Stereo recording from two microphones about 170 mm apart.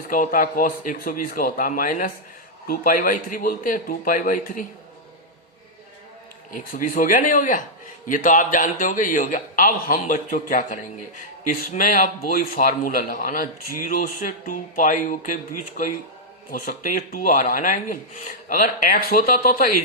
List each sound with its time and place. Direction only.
0.1 s speech: 55° left (ahead or behind)
6.5 s speech: 55° left (ahead or behind)